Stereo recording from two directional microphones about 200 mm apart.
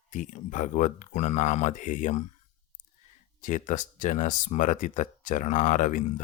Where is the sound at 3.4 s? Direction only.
40° left (ahead or behind).